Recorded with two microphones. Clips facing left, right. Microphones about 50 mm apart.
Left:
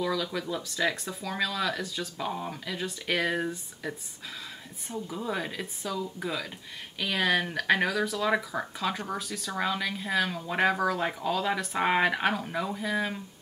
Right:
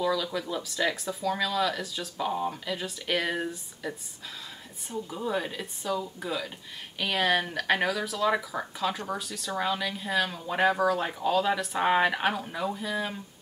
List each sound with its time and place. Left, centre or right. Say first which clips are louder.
0.0 s speech: right 2 dB; centre
4.9 s speech: right 2 dB; centre